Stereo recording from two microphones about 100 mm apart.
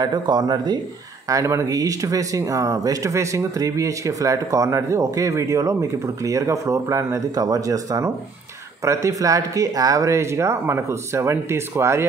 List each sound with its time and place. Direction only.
0.0 s speech: 45° right (ahead or behind); by 12.1 s 25° right (ahead or behind)